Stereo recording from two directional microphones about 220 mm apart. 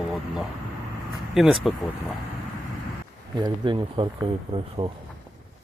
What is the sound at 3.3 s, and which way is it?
Speech, 20° right (ahead or behind).